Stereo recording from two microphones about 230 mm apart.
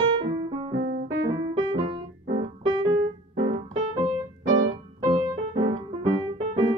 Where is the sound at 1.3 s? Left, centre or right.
Right.